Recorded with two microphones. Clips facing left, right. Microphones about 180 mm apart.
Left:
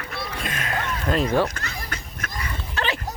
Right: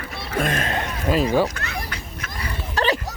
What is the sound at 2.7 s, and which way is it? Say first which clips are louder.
Dog: right 6 dB; 40° right (ahead or behind).